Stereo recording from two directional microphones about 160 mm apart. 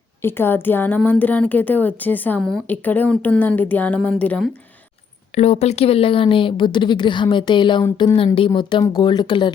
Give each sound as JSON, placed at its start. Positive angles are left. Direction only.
{"t": 0.2, "sound": "speech", "side_deg": 15}
{"t": 5.3, "sound": "speech", "side_deg": 40}